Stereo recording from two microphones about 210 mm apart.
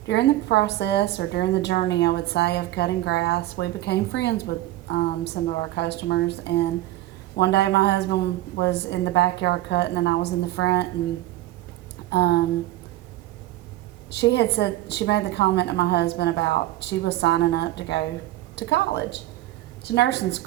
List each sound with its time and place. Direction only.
0.1 s a woman's voice: 55° left (ahead or behind)
12.1 s a woman's voice: 55° left (ahead or behind)
14.1 s a woman's voice: 55° left (ahead or behind)